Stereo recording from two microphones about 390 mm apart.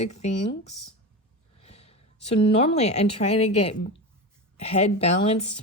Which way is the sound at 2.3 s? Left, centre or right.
Centre.